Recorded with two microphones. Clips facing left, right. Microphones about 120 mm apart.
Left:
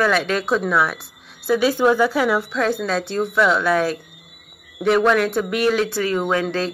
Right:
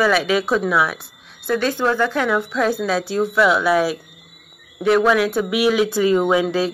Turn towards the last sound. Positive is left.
turn(degrees=-10)  # may be behind; listen again after turning